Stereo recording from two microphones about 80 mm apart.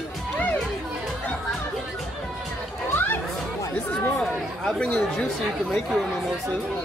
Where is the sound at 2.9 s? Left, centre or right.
Left.